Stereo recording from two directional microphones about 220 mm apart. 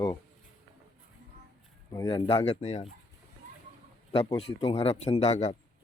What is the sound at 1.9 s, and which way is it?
Speech, 15° left (ahead or behind).